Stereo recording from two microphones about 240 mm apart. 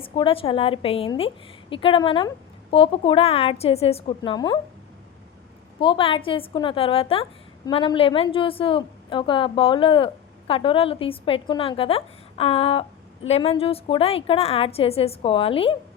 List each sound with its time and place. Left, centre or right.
0.0 s a woman's voice: left
5.8 s a woman's voice: left